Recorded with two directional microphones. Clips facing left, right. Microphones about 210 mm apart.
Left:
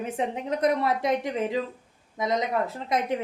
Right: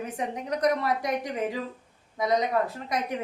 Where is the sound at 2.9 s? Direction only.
25° left (ahead or behind).